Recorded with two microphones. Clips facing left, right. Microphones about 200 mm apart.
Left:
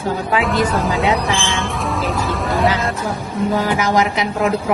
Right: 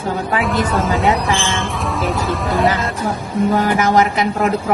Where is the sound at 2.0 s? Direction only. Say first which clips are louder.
Right 3 dB; centre (ahead or behind).